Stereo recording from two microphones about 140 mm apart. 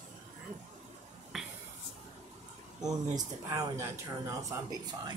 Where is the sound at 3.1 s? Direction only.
25° right (ahead or behind).